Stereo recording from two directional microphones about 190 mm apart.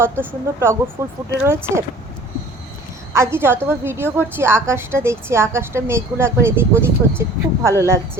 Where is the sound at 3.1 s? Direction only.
15° right (ahead or behind).